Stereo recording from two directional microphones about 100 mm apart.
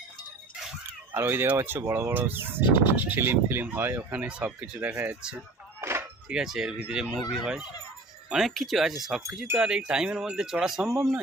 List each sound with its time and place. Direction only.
1.1 s speech: 20° right (ahead or behind)
4.2 s speech: 10° right (ahead or behind)
5.8 s a sound: 25° right (ahead or behind)
6.2 s speech: 5° right (ahead or behind)